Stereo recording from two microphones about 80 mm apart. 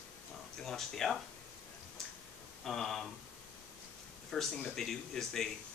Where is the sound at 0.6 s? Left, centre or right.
Centre.